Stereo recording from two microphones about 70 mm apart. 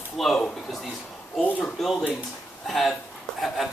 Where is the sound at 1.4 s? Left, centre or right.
Left.